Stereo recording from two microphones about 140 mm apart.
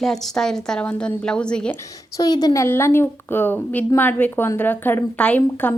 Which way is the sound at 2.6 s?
15° left (ahead or behind).